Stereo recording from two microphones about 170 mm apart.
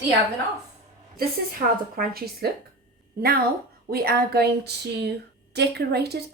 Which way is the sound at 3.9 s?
65° right (ahead or behind).